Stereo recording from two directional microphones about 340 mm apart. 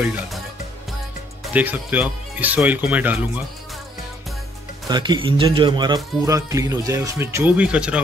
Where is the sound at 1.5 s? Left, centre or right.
Centre.